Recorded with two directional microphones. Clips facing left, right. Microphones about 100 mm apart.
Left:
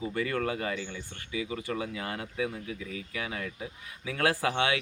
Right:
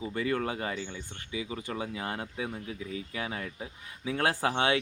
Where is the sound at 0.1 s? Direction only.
20° right (ahead or behind).